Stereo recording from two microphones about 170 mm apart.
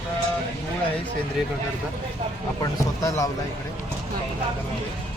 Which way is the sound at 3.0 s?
20° left (ahead or behind).